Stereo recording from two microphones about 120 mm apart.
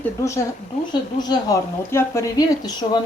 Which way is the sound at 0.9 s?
35° left (ahead or behind).